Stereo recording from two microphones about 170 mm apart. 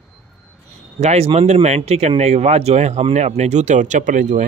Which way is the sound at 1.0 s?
40° right (ahead or behind).